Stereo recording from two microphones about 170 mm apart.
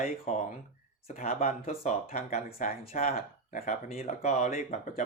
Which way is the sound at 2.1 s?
60° left (ahead or behind).